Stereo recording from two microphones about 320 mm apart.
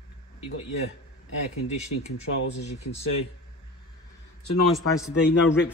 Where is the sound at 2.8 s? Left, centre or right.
Left.